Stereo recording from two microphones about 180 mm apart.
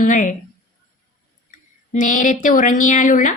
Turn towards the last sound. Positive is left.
turn(degrees=45)  # may be behind; listen again after turning